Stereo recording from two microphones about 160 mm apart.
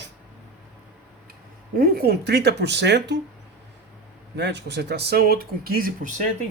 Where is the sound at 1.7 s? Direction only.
70° right (ahead or behind); by 3.2 s 90° right.